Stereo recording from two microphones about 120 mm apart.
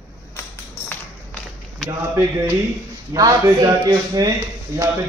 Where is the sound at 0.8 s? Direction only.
10° left (ahead or behind).